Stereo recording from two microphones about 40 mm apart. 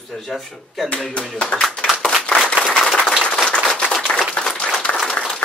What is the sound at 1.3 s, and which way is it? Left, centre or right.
Speech, left.